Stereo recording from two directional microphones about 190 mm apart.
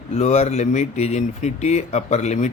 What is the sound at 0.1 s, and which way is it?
Speech, 35° left (ahead or behind).